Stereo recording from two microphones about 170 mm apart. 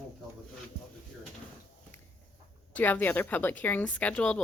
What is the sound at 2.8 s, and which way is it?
A woman's voice, 10° left (ahead or behind).